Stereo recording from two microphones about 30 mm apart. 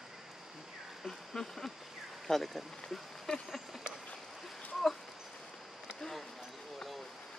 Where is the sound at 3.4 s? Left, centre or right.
Centre.